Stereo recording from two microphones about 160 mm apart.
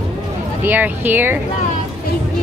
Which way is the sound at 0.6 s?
10° right (ahead or behind).